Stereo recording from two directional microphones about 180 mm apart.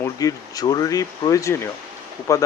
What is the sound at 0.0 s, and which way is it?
Speech, 20° left (ahead or behind).